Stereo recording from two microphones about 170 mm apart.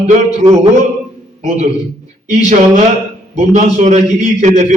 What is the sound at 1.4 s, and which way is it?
Speech, 45° right (ahead or behind).